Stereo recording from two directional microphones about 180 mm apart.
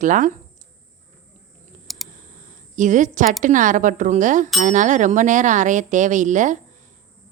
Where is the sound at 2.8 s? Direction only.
45° right (ahead or behind).